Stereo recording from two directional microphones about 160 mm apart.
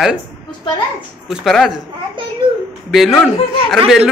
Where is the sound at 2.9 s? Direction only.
Centre (ahead or behind).